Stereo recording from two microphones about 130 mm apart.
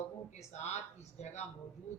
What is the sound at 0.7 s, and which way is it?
Speech, 60° left (ahead or behind).